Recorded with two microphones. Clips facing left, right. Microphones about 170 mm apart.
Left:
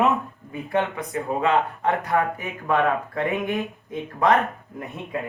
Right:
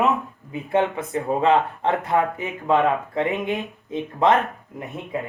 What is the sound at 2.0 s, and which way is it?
Speech, 20° right (ahead or behind).